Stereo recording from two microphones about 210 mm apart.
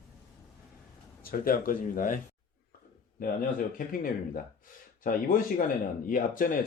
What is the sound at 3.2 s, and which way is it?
Speech, 40° left (ahead or behind).